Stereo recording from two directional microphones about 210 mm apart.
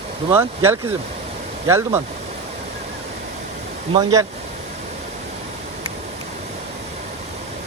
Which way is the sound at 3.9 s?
20° right (ahead or behind).